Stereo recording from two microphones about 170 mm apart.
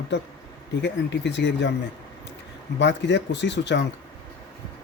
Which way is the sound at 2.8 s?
90° left.